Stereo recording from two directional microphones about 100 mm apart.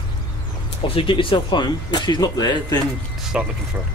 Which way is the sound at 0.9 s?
60° left (ahead or behind).